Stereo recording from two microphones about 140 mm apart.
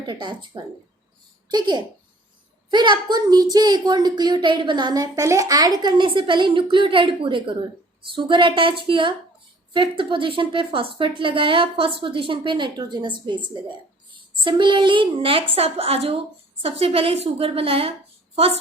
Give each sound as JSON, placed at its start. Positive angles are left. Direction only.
{"t": 0.0, "sound": "a child's voice", "side_deg": -35}